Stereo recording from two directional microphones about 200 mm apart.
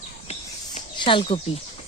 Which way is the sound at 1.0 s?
25° left (ahead or behind).